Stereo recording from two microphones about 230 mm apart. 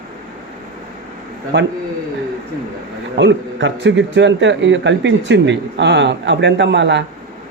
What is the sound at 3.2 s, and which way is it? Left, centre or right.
A man's voice, right.